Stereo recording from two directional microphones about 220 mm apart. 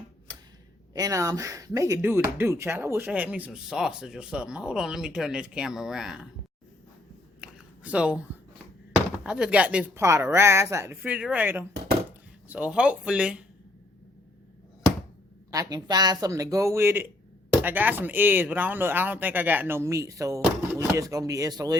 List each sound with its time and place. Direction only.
0.9 s speech: 15° right (ahead or behind)
7.4 s a sound: 5° right (ahead or behind)
9.2 s speech: 5° right (ahead or behind)
15.5 s speech: 15° right (ahead or behind)